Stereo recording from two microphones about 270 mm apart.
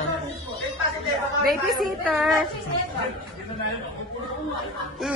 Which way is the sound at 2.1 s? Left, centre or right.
Centre.